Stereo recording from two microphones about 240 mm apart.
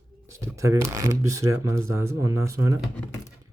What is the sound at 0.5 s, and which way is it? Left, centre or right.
Speech, centre.